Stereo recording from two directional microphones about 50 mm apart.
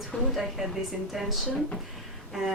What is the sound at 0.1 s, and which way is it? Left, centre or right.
Speech, centre.